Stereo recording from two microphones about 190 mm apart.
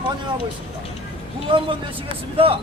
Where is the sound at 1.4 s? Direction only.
25° right (ahead or behind).